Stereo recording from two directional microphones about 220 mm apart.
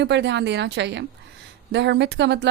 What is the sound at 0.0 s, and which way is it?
A woman's voice, 50° right (ahead or behind).